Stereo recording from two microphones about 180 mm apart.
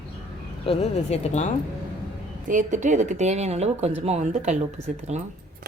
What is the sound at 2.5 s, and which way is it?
A woman's voice, 45° right (ahead or behind).